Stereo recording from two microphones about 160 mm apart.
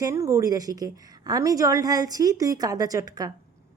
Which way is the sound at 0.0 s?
20° right (ahead or behind).